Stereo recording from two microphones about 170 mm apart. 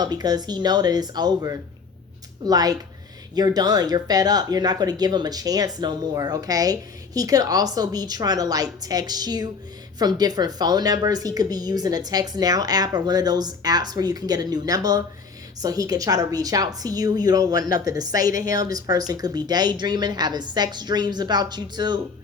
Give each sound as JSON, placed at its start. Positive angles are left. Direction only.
{"t": 0.0, "sound": "a woman's voice", "side_deg": -25}